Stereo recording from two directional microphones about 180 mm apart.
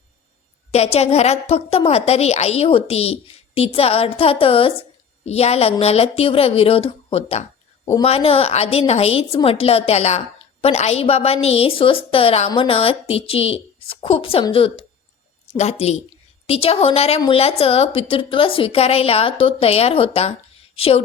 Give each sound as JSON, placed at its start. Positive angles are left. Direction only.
{"t": 0.7, "sound": "a woman's voice", "side_deg": 35}